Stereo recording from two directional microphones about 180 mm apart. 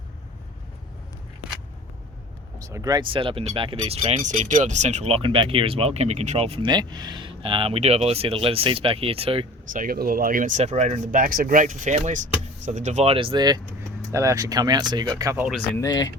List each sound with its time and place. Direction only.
2.6 s speech: 20° right (ahead or behind)
9.7 s speech: 55° right (ahead or behind); by 15.4 s 15° right (ahead or behind)
15.4 s speech: centre (ahead or behind)
15.8 s speech: 20° left (ahead or behind)